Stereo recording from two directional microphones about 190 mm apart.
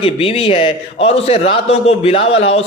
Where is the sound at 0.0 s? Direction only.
30° left (ahead or behind).